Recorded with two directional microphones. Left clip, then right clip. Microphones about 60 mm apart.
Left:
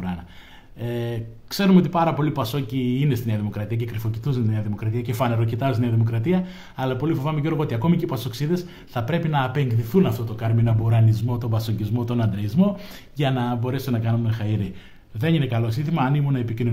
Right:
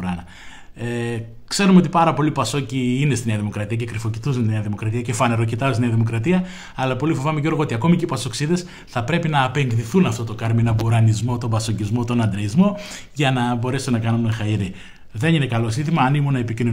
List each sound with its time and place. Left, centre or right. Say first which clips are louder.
0.8 s speech: right 3 dB; right
1.6 s speech: right 4 dB; right
5.0 s speech: right 4 dB; right
9.7 s speech: right 1 dB; centre
10.4 s speech: right 3 dB; right